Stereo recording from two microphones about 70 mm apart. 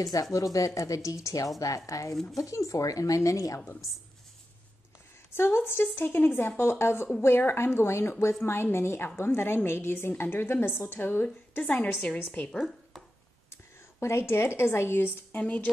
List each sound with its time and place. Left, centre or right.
0.0 s speech: left
5.3 s a woman's voice: left
12.5 s speech: centre
13.5 s a woman's voice: left